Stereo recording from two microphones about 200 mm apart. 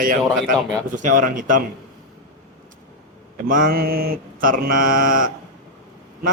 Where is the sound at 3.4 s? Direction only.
45° right (ahead or behind).